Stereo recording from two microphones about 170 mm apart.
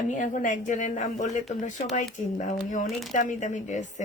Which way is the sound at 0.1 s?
50° left (ahead or behind).